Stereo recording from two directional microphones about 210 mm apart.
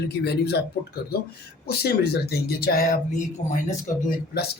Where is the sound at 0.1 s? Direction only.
50° left (ahead or behind).